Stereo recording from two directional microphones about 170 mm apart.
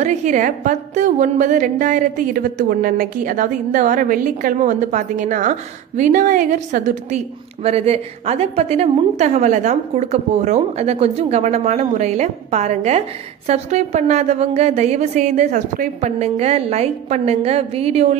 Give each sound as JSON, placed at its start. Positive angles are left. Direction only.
{"t": 0.0, "sound": "a woman's voice", "side_deg": -45}
{"t": 7.6, "sound": "a woman's voice", "side_deg": -35}